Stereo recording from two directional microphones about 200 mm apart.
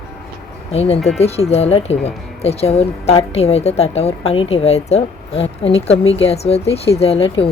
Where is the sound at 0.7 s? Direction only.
30° left (ahead or behind).